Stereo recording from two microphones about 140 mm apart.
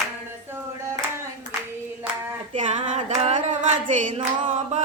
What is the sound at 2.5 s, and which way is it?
Music, 55° right (ahead or behind).